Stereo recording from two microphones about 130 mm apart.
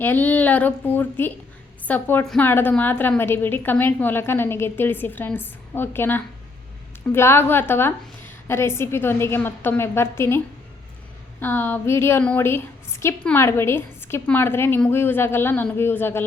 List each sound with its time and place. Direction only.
0.0 s a woman's voice: 15° left (ahead or behind)